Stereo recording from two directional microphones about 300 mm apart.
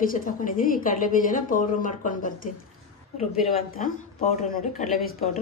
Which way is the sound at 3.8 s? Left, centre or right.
Left.